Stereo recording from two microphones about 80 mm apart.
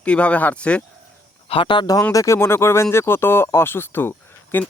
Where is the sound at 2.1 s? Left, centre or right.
Left.